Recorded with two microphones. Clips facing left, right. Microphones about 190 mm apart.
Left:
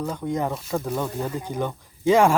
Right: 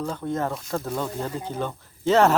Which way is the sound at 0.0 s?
10° left (ahead or behind).